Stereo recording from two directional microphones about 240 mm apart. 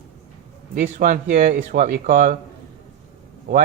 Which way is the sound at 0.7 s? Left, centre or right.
Right.